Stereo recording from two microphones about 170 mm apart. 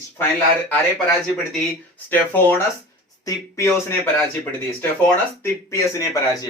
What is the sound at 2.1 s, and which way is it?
Speech, 10° left (ahead or behind).